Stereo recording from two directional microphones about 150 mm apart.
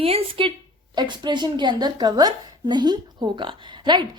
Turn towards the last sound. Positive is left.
turn(degrees=-30)  # may be behind; listen again after turning